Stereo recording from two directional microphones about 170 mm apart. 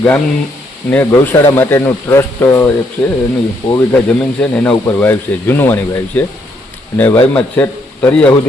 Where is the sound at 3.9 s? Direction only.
5° left (ahead or behind).